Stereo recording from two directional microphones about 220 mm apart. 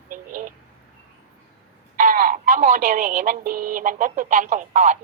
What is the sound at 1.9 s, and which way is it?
Speech, 35° right (ahead or behind).